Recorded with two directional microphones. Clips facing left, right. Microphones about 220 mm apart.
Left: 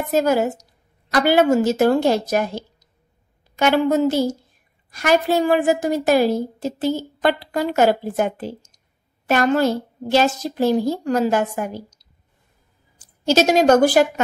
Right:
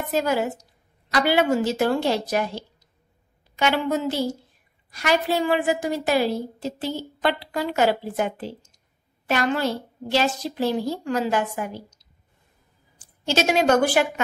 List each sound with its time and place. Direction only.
0.1 s a woman's voice: 45° left (ahead or behind)